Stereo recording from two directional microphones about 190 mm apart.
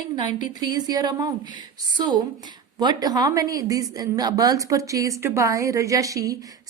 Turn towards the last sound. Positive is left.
turn(degrees=-15)  # may be behind; listen again after turning